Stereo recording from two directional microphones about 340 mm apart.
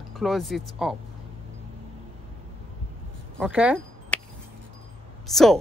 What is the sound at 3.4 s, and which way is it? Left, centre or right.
Speech, centre.